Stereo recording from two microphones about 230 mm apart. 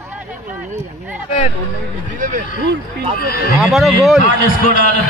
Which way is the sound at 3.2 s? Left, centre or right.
Left.